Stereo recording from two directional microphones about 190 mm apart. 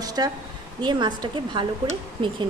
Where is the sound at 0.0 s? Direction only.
20° right (ahead or behind).